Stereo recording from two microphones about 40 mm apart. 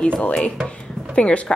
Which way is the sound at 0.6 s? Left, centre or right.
Left.